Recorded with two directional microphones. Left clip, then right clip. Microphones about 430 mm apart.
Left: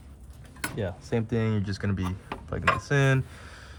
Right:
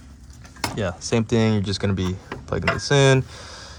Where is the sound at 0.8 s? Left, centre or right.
Right.